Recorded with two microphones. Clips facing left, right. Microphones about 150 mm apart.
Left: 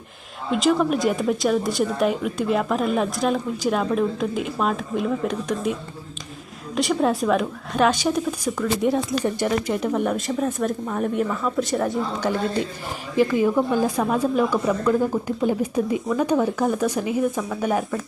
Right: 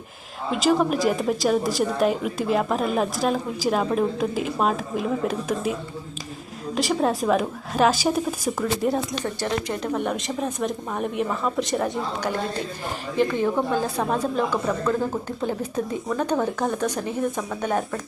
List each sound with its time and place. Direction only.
0.5 s a woman's voice: centre (ahead or behind)
6.7 s a woman's voice: centre (ahead or behind)
9.2 s a woman's voice: 10° left (ahead or behind)
13.1 s speech: 10° left (ahead or behind)